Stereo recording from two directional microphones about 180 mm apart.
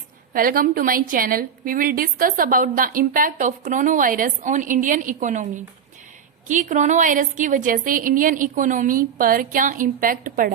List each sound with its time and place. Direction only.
0.3 s a woman's voice: 50° right (ahead or behind)